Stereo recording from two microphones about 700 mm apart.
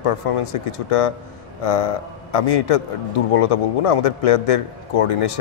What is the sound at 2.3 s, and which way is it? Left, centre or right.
Speech, left.